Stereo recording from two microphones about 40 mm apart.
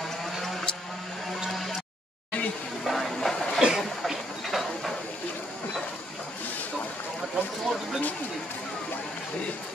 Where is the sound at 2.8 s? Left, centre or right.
Centre.